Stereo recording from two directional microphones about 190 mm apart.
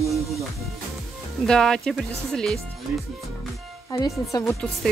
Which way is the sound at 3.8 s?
20° left (ahead or behind).